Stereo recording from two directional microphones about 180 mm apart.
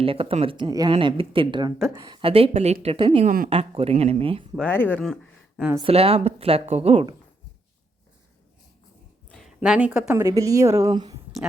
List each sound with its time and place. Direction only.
0.0 s speech: 30° right (ahead or behind)
2.5 s a woman's voice: 40° right (ahead or behind)
3.2 s a woman's voice: 50° right (ahead or behind)
3.5 s a woman's voice: 35° right (ahead or behind)
4.6 s speech: 10° left (ahead or behind)
5.8 s a woman's voice: 30° right (ahead or behind)
9.3 s a sound: centre (ahead or behind)
9.6 s speech: 5° right (ahead or behind); by 11.2 s 25° right (ahead or behind)